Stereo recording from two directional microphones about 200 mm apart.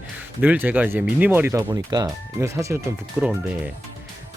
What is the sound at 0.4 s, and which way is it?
Speech, 5° right (ahead or behind).